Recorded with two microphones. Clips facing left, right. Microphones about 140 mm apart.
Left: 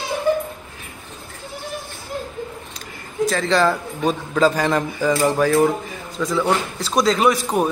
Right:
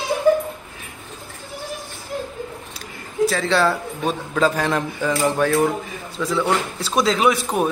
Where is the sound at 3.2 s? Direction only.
Centre (ahead or behind).